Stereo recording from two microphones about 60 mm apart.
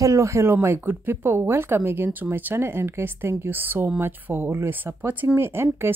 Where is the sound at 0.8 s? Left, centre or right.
Right.